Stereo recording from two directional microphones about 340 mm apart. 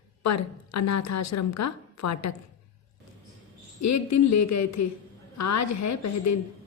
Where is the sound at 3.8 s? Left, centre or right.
Left.